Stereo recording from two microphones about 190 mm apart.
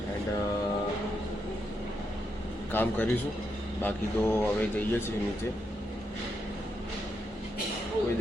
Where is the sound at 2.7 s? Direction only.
10° left (ahead or behind).